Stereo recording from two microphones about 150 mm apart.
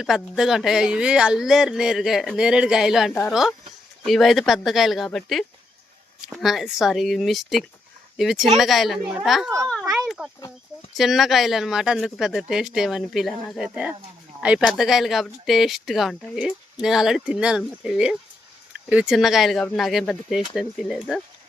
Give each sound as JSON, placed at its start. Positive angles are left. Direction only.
{"t": 0.0, "sound": "speech", "side_deg": 0}
{"t": 3.1, "sound": "speech", "side_deg": 15}
{"t": 4.0, "sound": "speech", "side_deg": 0}